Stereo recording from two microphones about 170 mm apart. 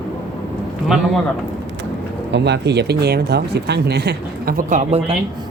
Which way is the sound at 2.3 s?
85° right.